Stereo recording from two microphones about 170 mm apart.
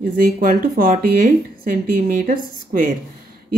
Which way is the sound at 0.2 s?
55° right (ahead or behind).